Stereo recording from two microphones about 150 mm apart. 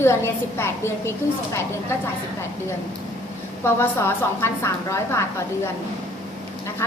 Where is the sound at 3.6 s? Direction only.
15° left (ahead or behind).